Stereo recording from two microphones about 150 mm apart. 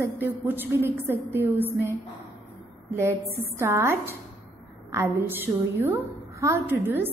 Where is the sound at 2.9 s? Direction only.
15° right (ahead or behind).